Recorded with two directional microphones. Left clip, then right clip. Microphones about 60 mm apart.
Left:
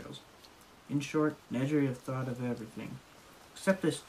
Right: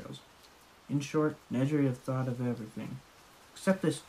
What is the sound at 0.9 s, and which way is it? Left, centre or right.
Speech, right.